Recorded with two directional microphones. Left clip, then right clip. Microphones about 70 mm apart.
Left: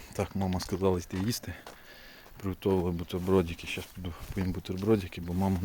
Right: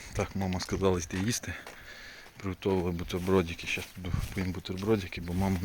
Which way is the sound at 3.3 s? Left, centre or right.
Left.